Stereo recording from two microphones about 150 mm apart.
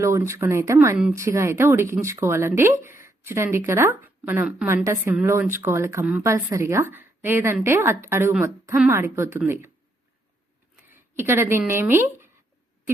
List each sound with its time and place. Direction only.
0.0 s speech: 20° right (ahead or behind)
10.8 s a sound: 15° right (ahead or behind)
11.7 s speech: 15° right (ahead or behind)